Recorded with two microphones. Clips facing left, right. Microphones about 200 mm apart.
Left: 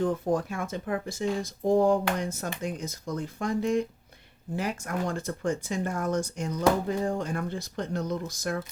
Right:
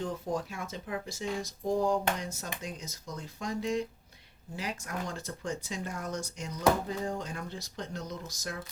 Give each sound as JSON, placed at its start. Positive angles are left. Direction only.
{"t": 0.0, "sound": "speech", "side_deg": 55}